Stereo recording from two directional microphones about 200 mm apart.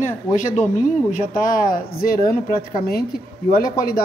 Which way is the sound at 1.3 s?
45° left (ahead or behind).